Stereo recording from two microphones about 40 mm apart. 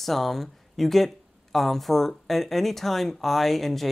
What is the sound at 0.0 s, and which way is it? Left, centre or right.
Speech, centre.